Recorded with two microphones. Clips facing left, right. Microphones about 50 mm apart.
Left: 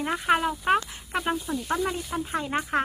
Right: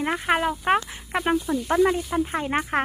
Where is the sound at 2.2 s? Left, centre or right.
Right.